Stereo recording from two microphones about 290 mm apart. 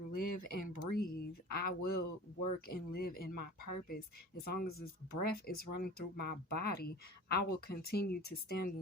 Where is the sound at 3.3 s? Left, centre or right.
Left.